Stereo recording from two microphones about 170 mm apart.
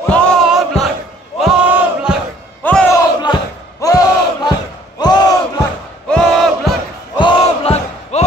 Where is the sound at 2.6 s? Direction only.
10° left (ahead or behind).